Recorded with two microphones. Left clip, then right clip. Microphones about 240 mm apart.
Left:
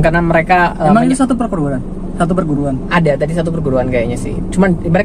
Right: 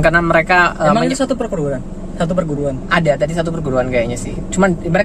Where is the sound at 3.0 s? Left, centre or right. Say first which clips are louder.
Left 1 dB; centre.